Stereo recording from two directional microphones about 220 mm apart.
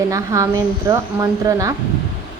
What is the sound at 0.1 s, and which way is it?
A woman's voice, 15° right (ahead or behind).